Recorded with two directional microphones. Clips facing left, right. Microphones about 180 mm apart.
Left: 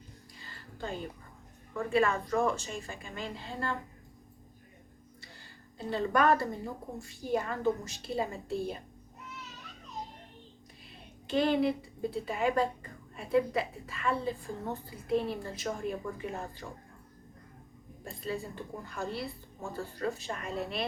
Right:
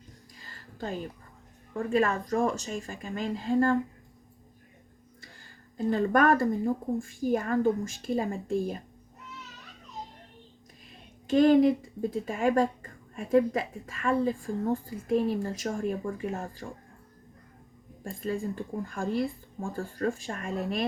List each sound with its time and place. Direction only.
0.4 s a sound: 40° right (ahead or behind)
1.7 s a woman's voice: 40° right (ahead or behind)
5.2 s a sound: 45° right (ahead or behind)
7.0 s speech: 50° right (ahead or behind)
11.3 s speech: 45° right (ahead or behind)
18.0 s speech: 45° right (ahead or behind)